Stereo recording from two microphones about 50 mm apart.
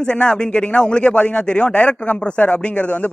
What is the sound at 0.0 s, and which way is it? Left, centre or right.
Speech, centre.